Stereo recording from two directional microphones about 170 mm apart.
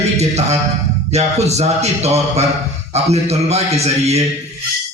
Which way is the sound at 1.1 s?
40° right (ahead or behind).